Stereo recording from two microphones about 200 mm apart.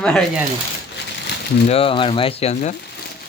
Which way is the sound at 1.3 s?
60° left (ahead or behind).